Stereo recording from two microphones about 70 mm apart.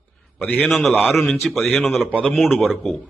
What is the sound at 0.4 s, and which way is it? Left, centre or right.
Speech, centre.